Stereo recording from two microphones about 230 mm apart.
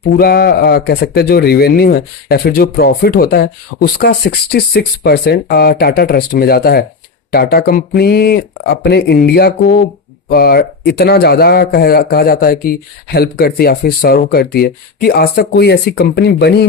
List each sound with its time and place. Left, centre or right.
0.2 s speech: left